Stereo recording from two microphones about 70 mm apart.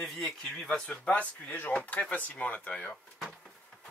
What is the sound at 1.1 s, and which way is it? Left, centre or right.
Speech, centre.